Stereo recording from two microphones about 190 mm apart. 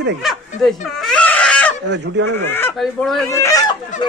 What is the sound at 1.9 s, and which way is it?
Speech, 65° right (ahead or behind).